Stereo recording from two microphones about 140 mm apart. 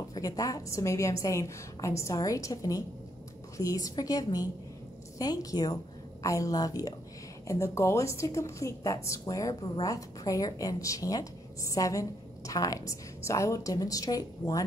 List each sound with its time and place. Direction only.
0.1 s a woman's voice: 25° left (ahead or behind)